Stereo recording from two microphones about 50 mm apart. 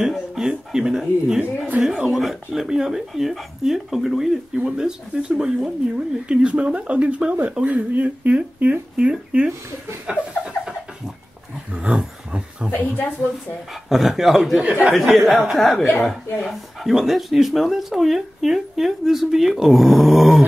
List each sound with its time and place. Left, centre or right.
0.0 s speech: centre
10.0 s a sound: centre
11.7 s a sound: centre
13.8 s speech: centre
14.6 s speech: right
15.0 s speech: centre